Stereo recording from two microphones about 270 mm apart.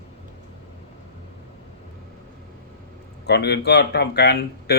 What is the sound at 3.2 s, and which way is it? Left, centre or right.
Speech, left.